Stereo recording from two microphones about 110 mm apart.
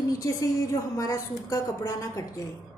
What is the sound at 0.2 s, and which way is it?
A woman's voice, 30° left (ahead or behind).